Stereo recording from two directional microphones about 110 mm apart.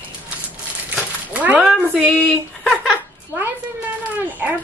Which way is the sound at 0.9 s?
15° right (ahead or behind).